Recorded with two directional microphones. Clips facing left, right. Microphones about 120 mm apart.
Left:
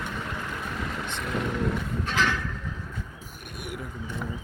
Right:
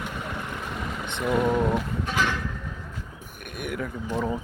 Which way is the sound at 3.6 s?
60° right (ahead or behind).